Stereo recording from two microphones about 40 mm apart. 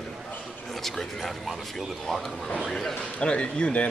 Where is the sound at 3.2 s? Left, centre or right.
Left.